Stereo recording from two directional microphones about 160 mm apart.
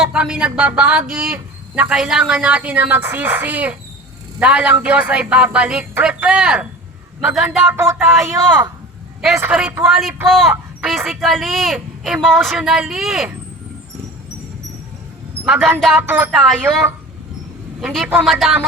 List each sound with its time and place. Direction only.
0.0 s a man's voice: 5° right (ahead or behind)
7.6 s speech: 15° right (ahead or behind)
9.4 s a man's voice: 5° right (ahead or behind)
15.4 s a man's voice: 10° right (ahead or behind)